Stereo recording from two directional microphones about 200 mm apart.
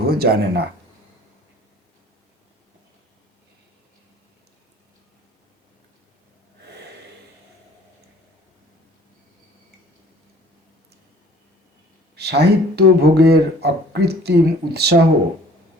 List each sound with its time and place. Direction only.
0.0 s speech: 50° right (ahead or behind)
12.1 s speech: 55° right (ahead or behind)